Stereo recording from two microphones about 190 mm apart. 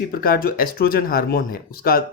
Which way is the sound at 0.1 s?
50° left (ahead or behind).